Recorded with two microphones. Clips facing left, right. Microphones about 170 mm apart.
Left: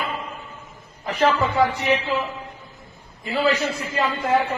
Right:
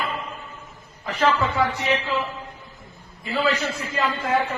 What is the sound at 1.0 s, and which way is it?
A man's voice, 15° left (ahead or behind).